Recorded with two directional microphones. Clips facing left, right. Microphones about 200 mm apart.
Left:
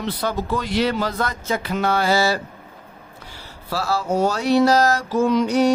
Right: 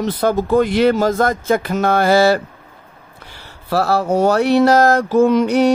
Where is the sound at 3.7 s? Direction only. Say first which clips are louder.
Right 6 dB; 60° right (ahead or behind).